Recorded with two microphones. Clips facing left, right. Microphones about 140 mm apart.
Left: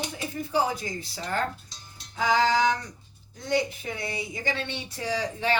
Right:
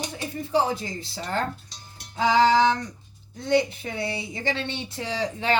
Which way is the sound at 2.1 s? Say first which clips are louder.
Right 4 dB; 30° right (ahead or behind).